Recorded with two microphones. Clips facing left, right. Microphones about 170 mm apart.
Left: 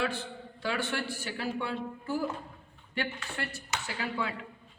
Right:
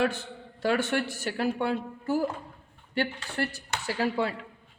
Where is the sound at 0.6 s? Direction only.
45° right (ahead or behind).